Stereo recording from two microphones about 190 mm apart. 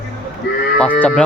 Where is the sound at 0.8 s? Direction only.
10° left (ahead or behind).